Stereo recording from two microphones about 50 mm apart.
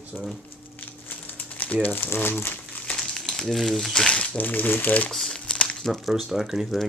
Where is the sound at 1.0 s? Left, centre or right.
Left.